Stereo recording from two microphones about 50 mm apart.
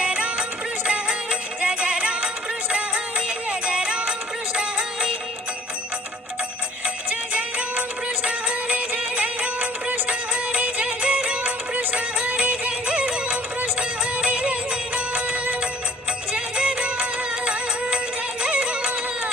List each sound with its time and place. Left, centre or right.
0.0 s music: right
7.1 s music: right